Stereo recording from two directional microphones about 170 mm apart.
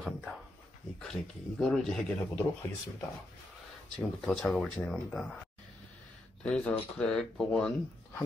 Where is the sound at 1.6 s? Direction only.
5° left (ahead or behind).